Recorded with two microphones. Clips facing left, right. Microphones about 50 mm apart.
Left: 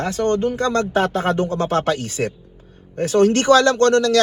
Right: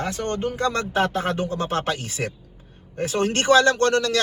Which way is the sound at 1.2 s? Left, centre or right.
Left.